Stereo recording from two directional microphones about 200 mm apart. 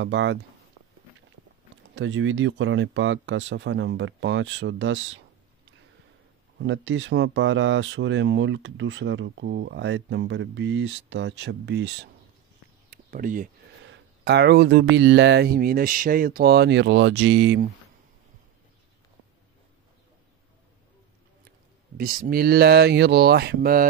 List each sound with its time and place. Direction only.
0.0 s speech: 65° right (ahead or behind)
2.0 s speech: 70° right (ahead or behind)
6.6 s speech: 70° right (ahead or behind)
12.9 s speech: 45° right (ahead or behind)
13.8 s speech: 60° right (ahead or behind)
21.9 s speech: 45° right (ahead or behind)